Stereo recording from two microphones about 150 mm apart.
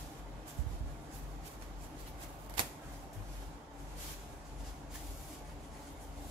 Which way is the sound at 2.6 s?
30° right (ahead or behind).